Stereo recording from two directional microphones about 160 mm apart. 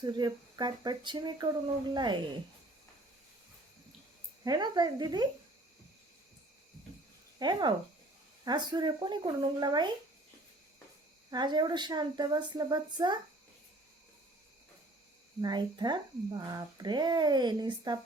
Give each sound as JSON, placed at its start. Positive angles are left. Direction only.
{"t": 0.0, "sound": "a woman's voice", "side_deg": -25}
{"t": 4.4, "sound": "a woman's voice", "side_deg": -25}
{"t": 7.3, "sound": "a woman's voice", "side_deg": -25}
{"t": 11.3, "sound": "a woman's voice", "side_deg": -25}
{"t": 15.4, "sound": "a woman's voice", "side_deg": -25}